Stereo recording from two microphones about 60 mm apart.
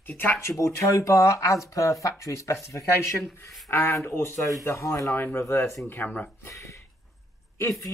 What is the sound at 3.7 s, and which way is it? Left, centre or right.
Speech, left.